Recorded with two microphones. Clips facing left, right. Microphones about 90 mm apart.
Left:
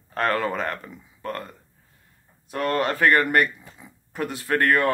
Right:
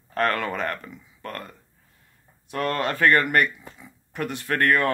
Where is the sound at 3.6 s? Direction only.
5° left (ahead or behind).